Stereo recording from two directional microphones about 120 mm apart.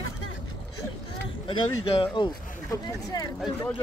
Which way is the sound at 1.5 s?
45° left (ahead or behind).